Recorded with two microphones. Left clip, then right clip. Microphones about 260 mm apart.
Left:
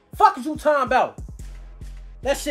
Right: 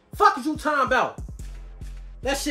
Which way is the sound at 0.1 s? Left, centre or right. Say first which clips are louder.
Left 2 dB; centre.